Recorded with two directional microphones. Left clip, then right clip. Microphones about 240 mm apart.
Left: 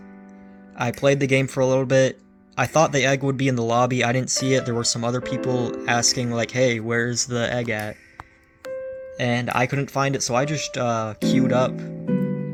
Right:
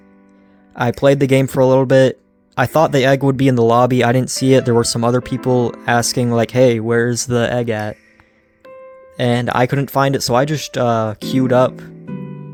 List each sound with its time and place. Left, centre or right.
0.8 s speech: right
9.1 s speech: right